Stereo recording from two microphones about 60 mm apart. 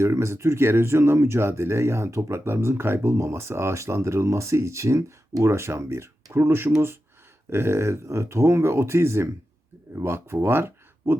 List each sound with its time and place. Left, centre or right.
0.0 s speech: right